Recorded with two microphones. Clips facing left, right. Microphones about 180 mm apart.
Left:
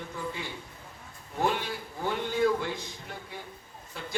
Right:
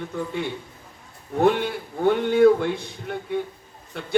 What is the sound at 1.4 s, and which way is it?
A man's voice, 60° right (ahead or behind).